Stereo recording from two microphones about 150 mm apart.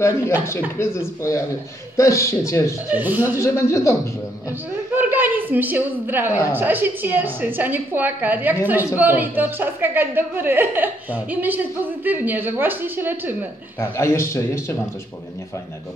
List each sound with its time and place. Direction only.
0.5 s a man's voice: 15° left (ahead or behind)
2.9 s a woman's voice: 10° right (ahead or behind)
3.3 s speech: 20° left (ahead or behind)
4.9 s a woman's voice: 10° right (ahead or behind)
13.7 s a man's voice: 15° left (ahead or behind)